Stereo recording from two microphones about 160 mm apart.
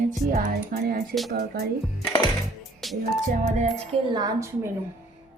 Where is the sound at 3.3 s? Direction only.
60° right (ahead or behind).